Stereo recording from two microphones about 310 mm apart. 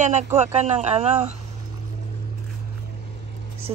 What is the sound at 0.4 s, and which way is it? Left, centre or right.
Speech, right.